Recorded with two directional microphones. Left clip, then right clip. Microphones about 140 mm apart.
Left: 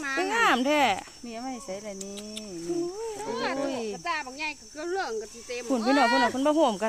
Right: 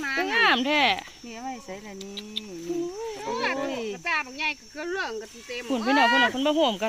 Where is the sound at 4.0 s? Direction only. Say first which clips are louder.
Right 4 dB; 35° left (ahead or behind).